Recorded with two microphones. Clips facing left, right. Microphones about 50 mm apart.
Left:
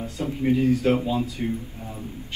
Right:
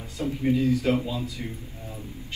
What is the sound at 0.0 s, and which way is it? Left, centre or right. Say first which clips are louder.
A man's voice: left 2 dB; left.